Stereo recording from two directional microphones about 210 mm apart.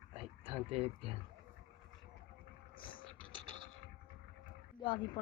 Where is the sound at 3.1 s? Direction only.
25° right (ahead or behind).